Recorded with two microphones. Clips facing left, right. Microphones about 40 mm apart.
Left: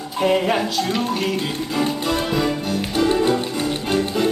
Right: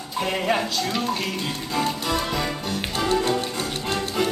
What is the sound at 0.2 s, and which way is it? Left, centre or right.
Speech, centre.